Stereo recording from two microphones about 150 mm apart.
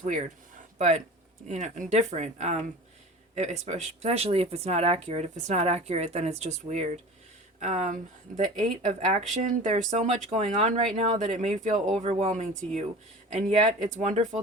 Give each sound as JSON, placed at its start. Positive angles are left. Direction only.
{"t": 0.0, "sound": "speech", "side_deg": -55}